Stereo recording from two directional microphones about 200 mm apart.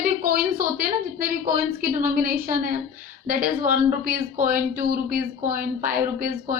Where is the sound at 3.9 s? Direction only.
45° right (ahead or behind).